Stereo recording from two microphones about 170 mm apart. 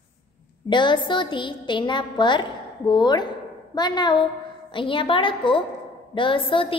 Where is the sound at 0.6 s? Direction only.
25° left (ahead or behind).